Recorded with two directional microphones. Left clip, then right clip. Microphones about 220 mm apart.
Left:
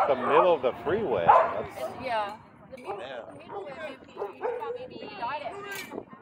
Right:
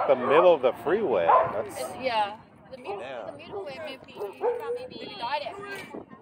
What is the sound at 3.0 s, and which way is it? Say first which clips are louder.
Speech: right 2 dB; 15° right (ahead or behind).